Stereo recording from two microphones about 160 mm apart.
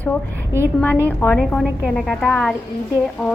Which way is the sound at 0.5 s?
15° right (ahead or behind).